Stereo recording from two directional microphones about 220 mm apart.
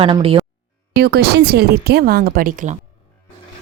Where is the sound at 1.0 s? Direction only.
45° right (ahead or behind).